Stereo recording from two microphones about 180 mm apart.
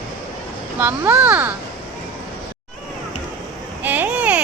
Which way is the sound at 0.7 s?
10° right (ahead or behind).